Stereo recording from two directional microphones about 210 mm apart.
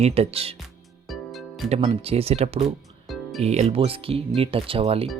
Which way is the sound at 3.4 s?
30° right (ahead or behind).